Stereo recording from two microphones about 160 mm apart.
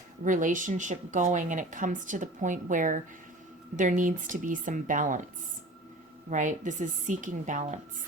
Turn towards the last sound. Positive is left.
turn(degrees=-50)  # may be behind; listen again after turning